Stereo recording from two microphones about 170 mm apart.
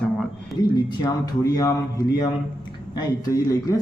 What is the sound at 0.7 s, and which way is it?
A man's voice, 25° left (ahead or behind).